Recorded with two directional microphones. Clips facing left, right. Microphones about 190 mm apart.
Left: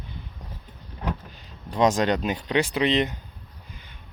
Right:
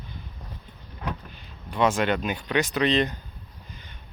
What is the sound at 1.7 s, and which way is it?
Speech, 40° left (ahead or behind).